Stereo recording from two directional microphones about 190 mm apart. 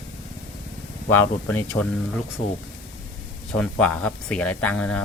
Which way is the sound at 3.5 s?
5° left (ahead or behind).